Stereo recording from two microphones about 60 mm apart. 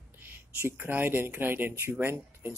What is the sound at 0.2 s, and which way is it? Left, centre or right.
Speech, right.